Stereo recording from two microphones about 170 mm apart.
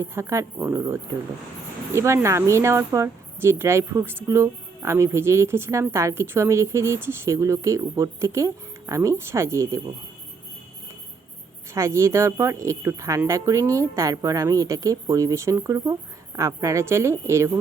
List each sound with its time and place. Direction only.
0.0 s speech: 15° right (ahead or behind)
2.0 s speech: 15° right (ahead or behind)
11.7 s speech: 15° right (ahead or behind)